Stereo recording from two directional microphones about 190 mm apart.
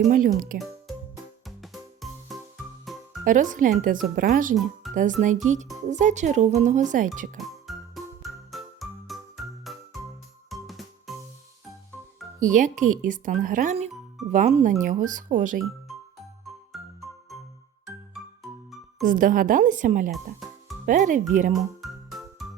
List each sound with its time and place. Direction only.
0.1 s speech: 45° right (ahead or behind)
0.6 s music: centre (ahead or behind)
3.2 s speech: 45° right (ahead or behind)
4.8 s music: centre (ahead or behind)
5.2 s speech: 40° right (ahead or behind)
7.3 s music: centre (ahead or behind)
12.5 s speech: 40° right (ahead or behind)
16.7 s music: centre (ahead or behind)
19.0 s speech: 45° right (ahead or behind)
20.1 s music: centre (ahead or behind)
20.8 s speech: 40° right (ahead or behind)
21.6 s music: centre (ahead or behind)